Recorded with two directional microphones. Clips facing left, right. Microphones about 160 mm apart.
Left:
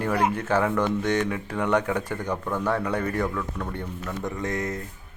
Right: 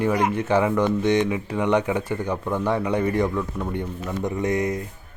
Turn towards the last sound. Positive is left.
turn(degrees=-20)  # may be behind; listen again after turning